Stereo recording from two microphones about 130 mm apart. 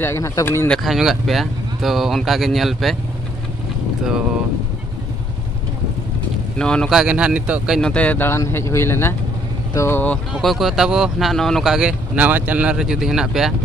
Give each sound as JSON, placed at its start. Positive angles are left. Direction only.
{"t": 0.0, "sound": "speech", "side_deg": 20}
{"t": 0.7, "sound": "speech", "side_deg": 0}
{"t": 6.6, "sound": "speech", "side_deg": 5}
{"t": 7.9, "sound": "speech", "side_deg": 10}
{"t": 10.3, "sound": "speech", "side_deg": 0}